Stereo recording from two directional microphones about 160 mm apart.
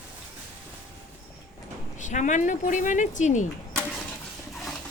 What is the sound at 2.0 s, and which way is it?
Speech, 50° left (ahead or behind).